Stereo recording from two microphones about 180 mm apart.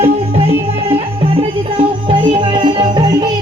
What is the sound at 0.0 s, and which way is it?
Music, 35° right (ahead or behind).